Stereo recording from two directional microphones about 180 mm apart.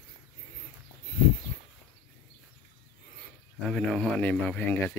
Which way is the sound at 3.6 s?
5° left (ahead or behind).